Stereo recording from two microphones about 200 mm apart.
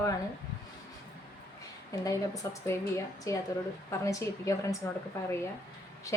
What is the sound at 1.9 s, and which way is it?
A woman's voice, 15° left (ahead or behind).